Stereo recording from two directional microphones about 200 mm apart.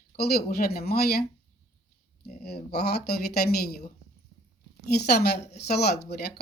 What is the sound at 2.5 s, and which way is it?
Speech, 55° left (ahead or behind).